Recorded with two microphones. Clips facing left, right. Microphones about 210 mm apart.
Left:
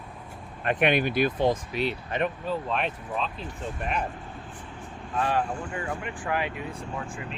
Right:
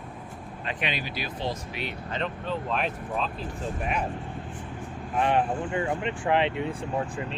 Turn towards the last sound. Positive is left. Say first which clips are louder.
# right 5 dB
turn(degrees=-35)  # may be behind; listen again after turning